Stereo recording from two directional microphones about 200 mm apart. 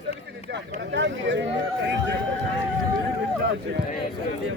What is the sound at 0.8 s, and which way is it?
Speech, 60° right (ahead or behind).